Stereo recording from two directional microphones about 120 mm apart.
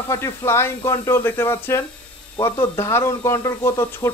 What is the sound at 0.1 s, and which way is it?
Speech, 25° left (ahead or behind).